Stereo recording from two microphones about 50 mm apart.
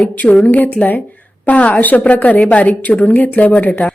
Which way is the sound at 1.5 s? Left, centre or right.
Left.